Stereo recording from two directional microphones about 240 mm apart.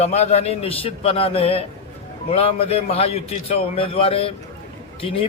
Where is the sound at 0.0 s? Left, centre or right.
Left.